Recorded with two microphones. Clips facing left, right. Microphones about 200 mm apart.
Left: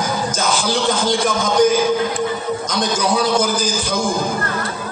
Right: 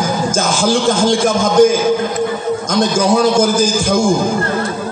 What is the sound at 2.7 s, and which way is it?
Music, 45° right (ahead or behind).